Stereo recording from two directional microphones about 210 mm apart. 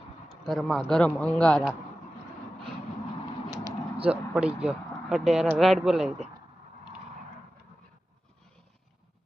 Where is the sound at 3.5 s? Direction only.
15° right (ahead or behind).